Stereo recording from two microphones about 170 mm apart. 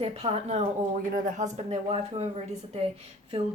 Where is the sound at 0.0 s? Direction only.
35° right (ahead or behind).